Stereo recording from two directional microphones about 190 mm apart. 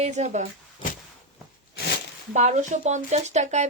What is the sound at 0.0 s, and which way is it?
Speech, 35° right (ahead or behind).